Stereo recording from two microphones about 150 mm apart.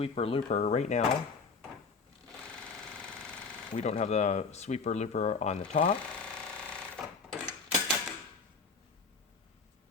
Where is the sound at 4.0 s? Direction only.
50° left (ahead or behind).